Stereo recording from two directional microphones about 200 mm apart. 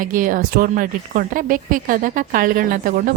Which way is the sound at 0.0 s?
45° right (ahead or behind).